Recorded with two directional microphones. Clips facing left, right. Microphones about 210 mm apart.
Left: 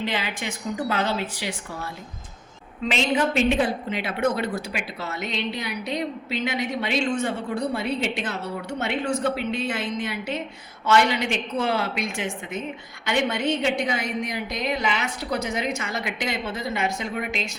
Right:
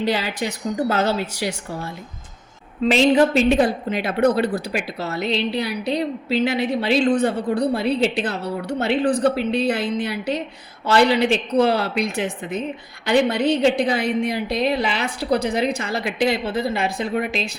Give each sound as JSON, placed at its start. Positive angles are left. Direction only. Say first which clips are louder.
{"t": 0.0, "sound": "a woman's voice", "louder": "right 6 dB", "side_deg": -40}
{"t": 2.8, "sound": "a woman's voice", "louder": "right 8 dB", "side_deg": -35}